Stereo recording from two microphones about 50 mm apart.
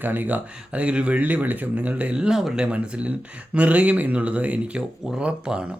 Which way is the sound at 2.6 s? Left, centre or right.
Right.